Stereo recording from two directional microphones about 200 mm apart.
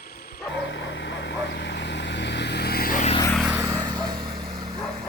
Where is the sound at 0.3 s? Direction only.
65° left (ahead or behind); by 3.2 s 40° left (ahead or behind).